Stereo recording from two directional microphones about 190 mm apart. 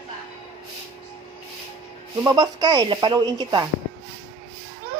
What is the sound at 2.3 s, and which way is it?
Speech, 20° right (ahead or behind).